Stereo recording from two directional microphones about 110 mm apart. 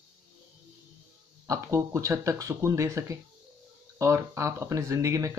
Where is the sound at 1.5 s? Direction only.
30° right (ahead or behind).